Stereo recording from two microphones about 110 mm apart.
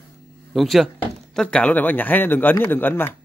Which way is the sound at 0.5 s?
Centre (ahead or behind).